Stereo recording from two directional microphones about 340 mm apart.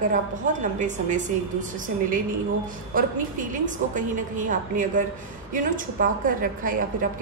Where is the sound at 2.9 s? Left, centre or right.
Right.